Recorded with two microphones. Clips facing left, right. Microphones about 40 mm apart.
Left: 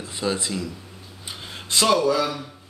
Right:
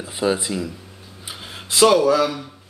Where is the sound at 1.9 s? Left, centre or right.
Centre.